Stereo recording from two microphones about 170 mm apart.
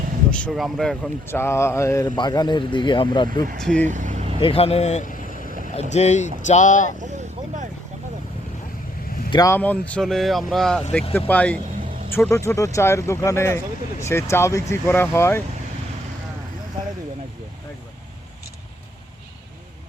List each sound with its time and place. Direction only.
0.3 s speech: 5° left (ahead or behind)
1.3 s speech: 15° left (ahead or behind)
3.6 s speech: 5° left (ahead or behind)
3.8 s vehicle: 45° right (ahead or behind)
4.4 s speech: 35° left (ahead or behind); by 5.5 s 50° left (ahead or behind)
5.5 s vehicle: 50° right (ahead or behind)
5.9 s speech: 40° left (ahead or behind)
7.0 s vehicle: 45° right (ahead or behind)
9.3 s speech: 20° left (ahead or behind)
9.6 s speech: 10° left (ahead or behind)